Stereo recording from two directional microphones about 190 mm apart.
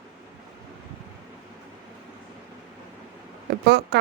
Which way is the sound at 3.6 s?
60° right (ahead or behind).